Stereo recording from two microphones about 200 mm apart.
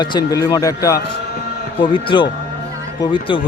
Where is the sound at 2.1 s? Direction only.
20° left (ahead or behind).